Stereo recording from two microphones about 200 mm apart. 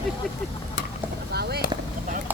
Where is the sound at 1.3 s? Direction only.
55° right (ahead or behind).